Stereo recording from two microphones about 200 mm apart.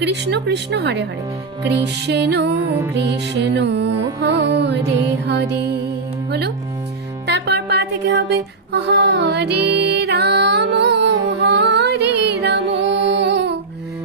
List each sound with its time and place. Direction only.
0.0 s music: 60° right (ahead or behind)
7.2 s music: 55° right (ahead or behind)